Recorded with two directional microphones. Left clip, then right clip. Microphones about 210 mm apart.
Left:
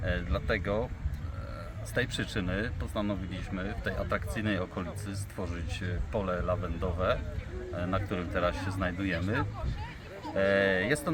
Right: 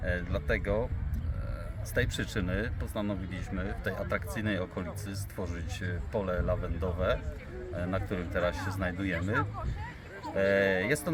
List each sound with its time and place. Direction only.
0.0 s speech: 5° right (ahead or behind)
2.0 s speech: 10° right (ahead or behind)